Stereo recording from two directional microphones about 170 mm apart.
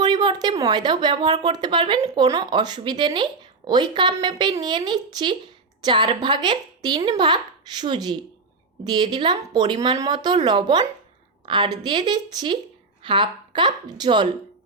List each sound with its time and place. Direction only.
0.0 s a woman's voice: 25° right (ahead or behind)